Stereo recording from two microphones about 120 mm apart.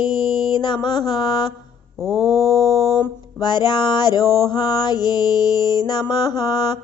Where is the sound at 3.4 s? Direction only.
35° left (ahead or behind).